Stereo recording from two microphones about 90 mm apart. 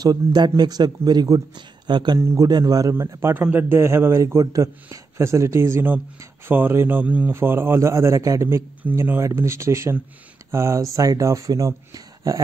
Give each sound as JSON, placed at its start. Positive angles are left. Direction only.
{"t": 0.0, "sound": "a man's voice", "side_deg": -50}
{"t": 2.1, "sound": "speech", "side_deg": -30}
{"t": 2.4, "sound": "a man's voice", "side_deg": -45}
{"t": 2.9, "sound": "a man's voice", "side_deg": -30}
{"t": 8.8, "sound": "a man's voice", "side_deg": -20}
{"t": 9.2, "sound": "speech", "side_deg": -30}